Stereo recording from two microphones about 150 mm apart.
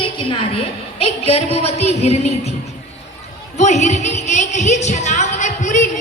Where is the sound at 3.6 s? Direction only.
50° left (ahead or behind).